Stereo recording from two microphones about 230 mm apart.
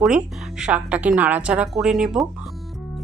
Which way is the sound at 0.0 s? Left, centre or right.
Centre.